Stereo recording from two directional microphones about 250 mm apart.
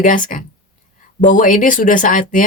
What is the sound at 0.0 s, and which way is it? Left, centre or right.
Speech, left.